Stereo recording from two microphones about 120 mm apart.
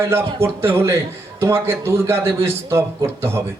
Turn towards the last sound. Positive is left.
turn(degrees=-20)  # may be behind; listen again after turning